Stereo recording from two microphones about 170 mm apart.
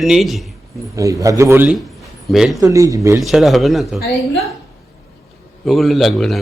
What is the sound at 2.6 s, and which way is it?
Speech, 20° right (ahead or behind).